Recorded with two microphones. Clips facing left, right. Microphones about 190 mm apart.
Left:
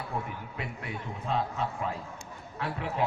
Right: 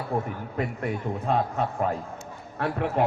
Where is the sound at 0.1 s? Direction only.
45° right (ahead or behind).